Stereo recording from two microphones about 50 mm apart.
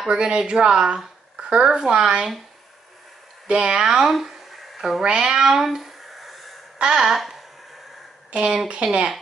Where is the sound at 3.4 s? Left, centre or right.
Centre.